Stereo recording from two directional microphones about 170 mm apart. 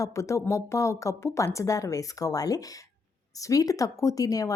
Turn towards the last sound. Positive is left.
turn(degrees=20)  # may be behind; listen again after turning